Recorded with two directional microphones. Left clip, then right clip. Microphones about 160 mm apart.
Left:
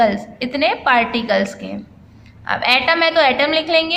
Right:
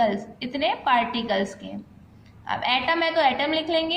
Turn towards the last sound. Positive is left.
turn(degrees=30)  # may be behind; listen again after turning